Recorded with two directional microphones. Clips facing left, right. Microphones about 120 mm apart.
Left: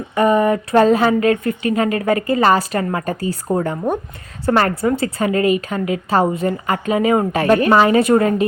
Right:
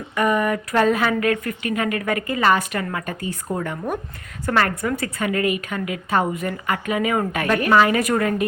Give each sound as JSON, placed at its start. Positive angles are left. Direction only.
{"t": 0.1, "sound": "a woman's voice", "side_deg": 30}